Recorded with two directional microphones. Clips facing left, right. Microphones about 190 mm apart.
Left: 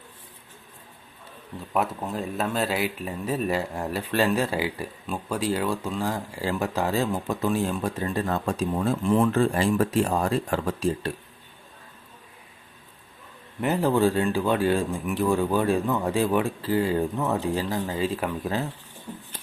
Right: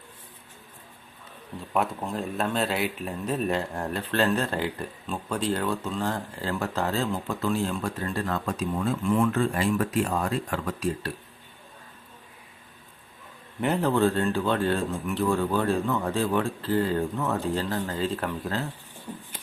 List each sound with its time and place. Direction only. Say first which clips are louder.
1.7 s speech: left 1 dB; 5° left (ahead or behind); by 8.5 s 20° left (ahead or behind)
8.7 s speech: left 2 dB; 35° left (ahead or behind)
13.6 s speech: left 1 dB; 5° left (ahead or behind)